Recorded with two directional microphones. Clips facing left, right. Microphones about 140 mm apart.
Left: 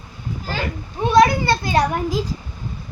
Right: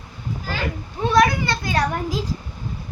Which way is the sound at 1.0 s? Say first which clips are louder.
Left 3 dB; 25° left (ahead or behind).